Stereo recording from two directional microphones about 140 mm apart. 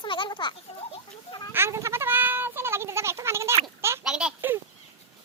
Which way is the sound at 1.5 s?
20° right (ahead or behind).